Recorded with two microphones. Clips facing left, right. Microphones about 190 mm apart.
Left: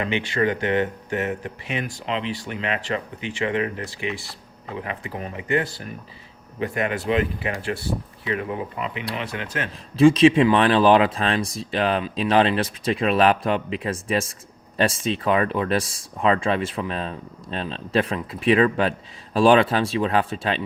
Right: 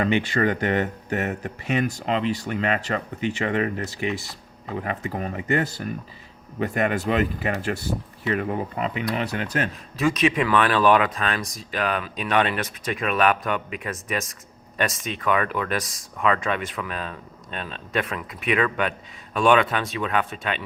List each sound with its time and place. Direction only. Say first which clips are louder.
0.1 s speech: right 1 dB; 40° right (ahead or behind)
10.0 s speech: left 8 dB; 30° left (ahead or behind)